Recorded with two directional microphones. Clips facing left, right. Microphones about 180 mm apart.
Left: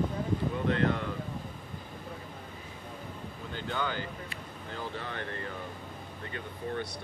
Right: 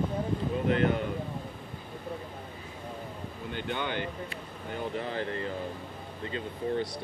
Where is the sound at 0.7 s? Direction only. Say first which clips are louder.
Right 3 dB; 20° right (ahead or behind).